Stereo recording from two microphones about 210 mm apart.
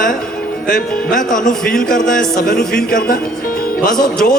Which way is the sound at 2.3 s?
40° left (ahead or behind).